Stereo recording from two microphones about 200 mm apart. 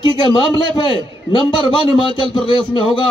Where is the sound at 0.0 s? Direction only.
20° left (ahead or behind).